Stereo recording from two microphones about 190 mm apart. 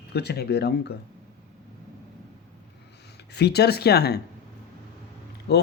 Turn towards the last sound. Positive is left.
turn(degrees=60)  # may be behind; listen again after turning